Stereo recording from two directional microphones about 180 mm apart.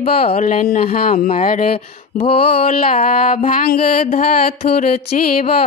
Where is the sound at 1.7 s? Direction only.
30° left (ahead or behind).